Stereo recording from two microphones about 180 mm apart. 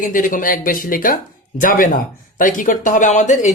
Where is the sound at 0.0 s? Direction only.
50° left (ahead or behind).